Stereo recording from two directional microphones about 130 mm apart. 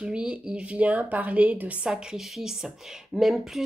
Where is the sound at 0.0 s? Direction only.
10° right (ahead or behind).